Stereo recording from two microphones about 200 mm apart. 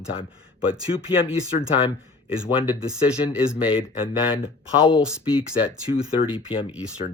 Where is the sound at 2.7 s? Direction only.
5° right (ahead or behind).